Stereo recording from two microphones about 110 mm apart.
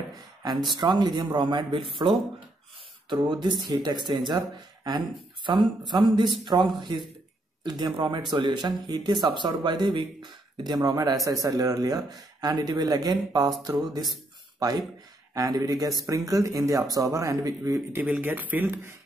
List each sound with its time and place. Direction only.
0.4 s speech: 40° right (ahead or behind)
17.9 s speech: 15° right (ahead or behind)